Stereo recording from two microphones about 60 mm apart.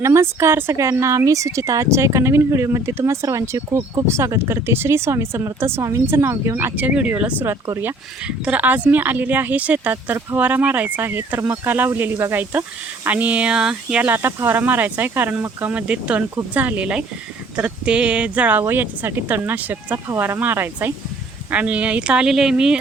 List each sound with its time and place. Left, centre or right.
0.0 s speech: right
0.8 s speech: right
3.4 s speech: right
6.7 s a woman's voice: right
8.4 s a woman's voice: right
11.0 s a woman's voice: right
13.6 s speech: centre
14.0 s a woman's voice: right
20.1 s speech: right
20.4 s speech: right
21.5 s a woman's voice: right